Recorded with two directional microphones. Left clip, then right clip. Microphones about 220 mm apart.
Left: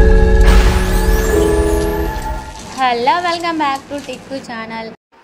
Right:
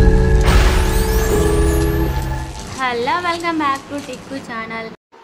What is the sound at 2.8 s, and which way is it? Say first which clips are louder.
A woman's voice: left 5 dB; 15° left (ahead or behind).